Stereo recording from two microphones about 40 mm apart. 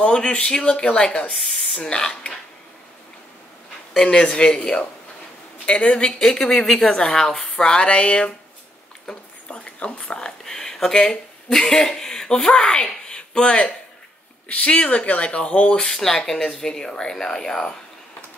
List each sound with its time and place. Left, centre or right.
0.0 s a man's voice: left
4.0 s a man's voice: left
6.0 s a woman's voice: centre
7.9 s a man's voice: left
9.5 s speech: left
15.8 s a woman's voice: centre